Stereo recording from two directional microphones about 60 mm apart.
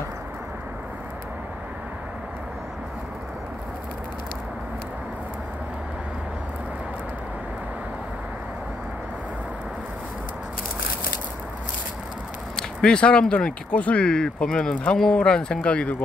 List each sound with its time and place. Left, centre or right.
12.5 s speech: centre